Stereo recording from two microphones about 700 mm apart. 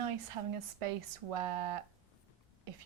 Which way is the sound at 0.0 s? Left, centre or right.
Right.